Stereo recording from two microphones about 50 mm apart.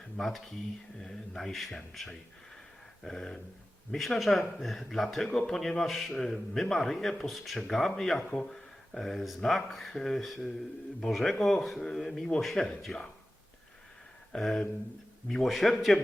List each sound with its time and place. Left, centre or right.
0.2 s a man's voice: centre
6.1 s a man's voice: centre
8.3 s speech: left
8.5 s a man's voice: centre
14.3 s a man's voice: centre